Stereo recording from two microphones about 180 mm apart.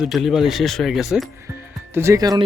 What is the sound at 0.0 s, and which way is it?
Speech, centre (ahead or behind).